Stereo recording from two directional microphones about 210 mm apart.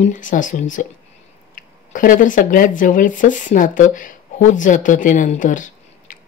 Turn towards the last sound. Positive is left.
turn(degrees=35)  # may be behind; listen again after turning